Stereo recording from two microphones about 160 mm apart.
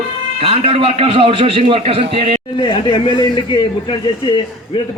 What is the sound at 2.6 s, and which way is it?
Speech, 35° left (ahead or behind).